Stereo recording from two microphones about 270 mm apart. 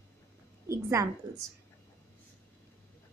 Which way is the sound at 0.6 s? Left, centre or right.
Centre.